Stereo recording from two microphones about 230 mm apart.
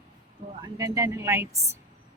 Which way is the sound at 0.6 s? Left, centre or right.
Centre.